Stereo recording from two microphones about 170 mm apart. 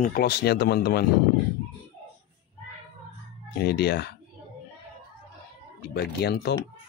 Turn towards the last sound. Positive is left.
turn(degrees=75)  # may be behind; listen again after turning